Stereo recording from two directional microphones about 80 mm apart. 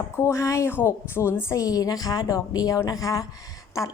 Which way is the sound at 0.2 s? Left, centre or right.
Left.